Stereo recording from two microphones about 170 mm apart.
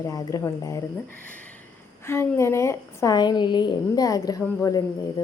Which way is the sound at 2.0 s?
15° left (ahead or behind).